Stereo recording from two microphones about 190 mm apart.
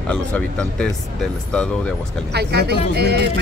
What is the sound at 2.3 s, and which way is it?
Speech, 60° right (ahead or behind).